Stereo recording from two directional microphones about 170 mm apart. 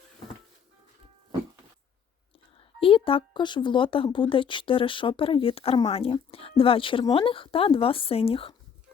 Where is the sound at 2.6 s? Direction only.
30° left (ahead or behind).